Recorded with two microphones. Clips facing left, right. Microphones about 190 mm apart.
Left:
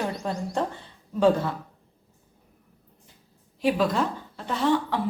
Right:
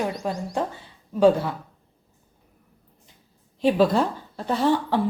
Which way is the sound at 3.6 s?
30° right (ahead or behind).